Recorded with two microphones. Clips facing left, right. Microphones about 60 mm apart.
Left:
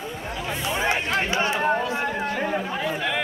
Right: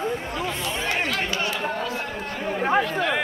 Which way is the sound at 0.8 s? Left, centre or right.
Left.